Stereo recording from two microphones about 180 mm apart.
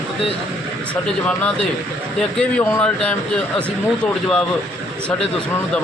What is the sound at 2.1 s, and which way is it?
Speech, 5° left (ahead or behind).